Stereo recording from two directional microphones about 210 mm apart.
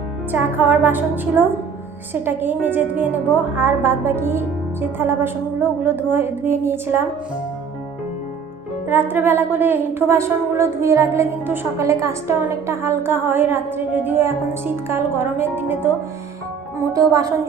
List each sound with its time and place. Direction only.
0.3 s a woman's voice: 10° right (ahead or behind)
8.9 s a woman's voice: 10° right (ahead or behind)
16.9 s a woman's voice: 15° right (ahead or behind)